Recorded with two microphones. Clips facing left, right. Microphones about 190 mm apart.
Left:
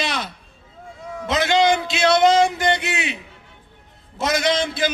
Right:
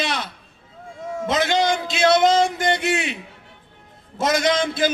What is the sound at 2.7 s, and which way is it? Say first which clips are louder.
Speech: right 4 dB; 50° right (ahead or behind).